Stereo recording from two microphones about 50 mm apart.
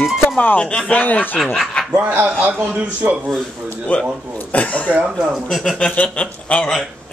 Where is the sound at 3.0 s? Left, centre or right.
Right.